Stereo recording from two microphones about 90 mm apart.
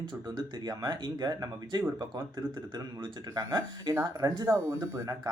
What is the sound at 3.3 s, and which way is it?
Speech, 40° right (ahead or behind).